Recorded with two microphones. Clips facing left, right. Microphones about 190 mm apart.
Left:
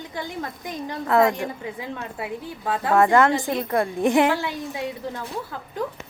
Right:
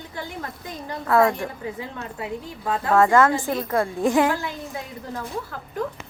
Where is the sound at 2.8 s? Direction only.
20° left (ahead or behind).